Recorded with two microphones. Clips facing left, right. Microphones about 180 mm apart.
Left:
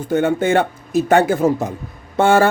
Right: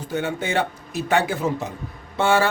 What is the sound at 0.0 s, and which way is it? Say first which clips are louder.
Speech: left 9 dB; 50° left (ahead or behind).